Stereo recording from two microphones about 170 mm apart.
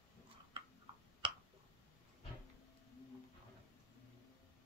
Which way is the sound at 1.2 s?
30° right (ahead or behind).